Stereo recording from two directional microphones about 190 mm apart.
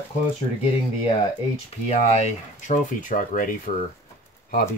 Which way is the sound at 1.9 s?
40° left (ahead or behind).